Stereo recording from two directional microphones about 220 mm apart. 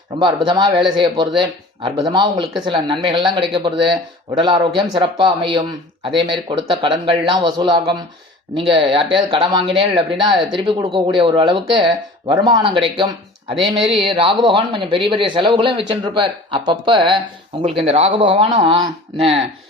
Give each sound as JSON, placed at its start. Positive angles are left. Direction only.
{"t": 0.2, "sound": "speech", "side_deg": -20}